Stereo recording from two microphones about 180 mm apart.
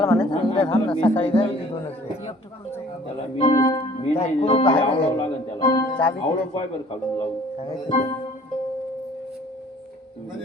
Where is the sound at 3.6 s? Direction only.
20° left (ahead or behind).